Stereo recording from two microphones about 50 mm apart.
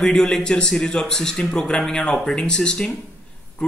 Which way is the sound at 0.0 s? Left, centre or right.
Centre.